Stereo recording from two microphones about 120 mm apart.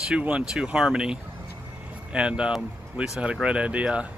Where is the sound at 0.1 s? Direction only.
5° right (ahead or behind).